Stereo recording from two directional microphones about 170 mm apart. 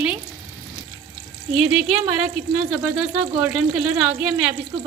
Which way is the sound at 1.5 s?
Centre (ahead or behind).